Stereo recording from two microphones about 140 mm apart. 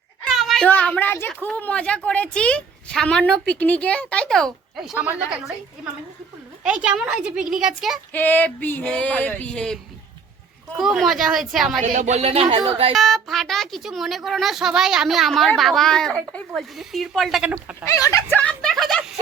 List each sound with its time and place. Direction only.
0.3 s a sound: centre (ahead or behind)
0.7 s a woman's voice: 10° left (ahead or behind)
6.7 s a woman's voice: 10° right (ahead or behind)
8.1 s a woman's voice: 10° left (ahead or behind)
10.8 s a woman's voice: centre (ahead or behind)
11.8 s speech: 55° right (ahead or behind)
12.9 s a woman's voice: centre (ahead or behind)
17.8 s speech: 25° left (ahead or behind)
18.4 s a sound: 5° left (ahead or behind)